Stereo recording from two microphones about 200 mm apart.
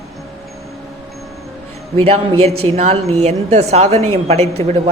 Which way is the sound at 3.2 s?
35° right (ahead or behind).